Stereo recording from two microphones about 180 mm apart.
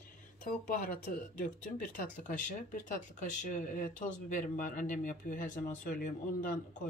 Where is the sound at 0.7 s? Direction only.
50° left (ahead or behind).